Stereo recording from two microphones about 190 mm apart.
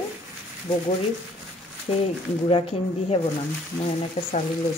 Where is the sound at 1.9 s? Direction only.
30° left (ahead or behind).